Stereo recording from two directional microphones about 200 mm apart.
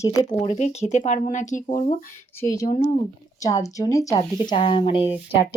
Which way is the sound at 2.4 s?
15° left (ahead or behind).